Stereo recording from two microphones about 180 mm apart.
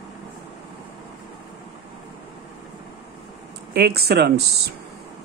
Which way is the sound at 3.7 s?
60° right (ahead or behind).